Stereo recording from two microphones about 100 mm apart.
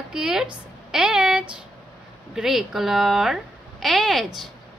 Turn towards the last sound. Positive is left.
turn(degrees=0)  # may be behind; listen again after turning